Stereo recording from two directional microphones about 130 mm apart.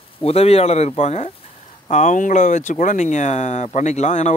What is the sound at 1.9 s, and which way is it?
Speech, 65° left (ahead or behind).